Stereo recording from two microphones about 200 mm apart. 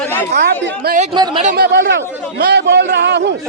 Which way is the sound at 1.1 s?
25° right (ahead or behind).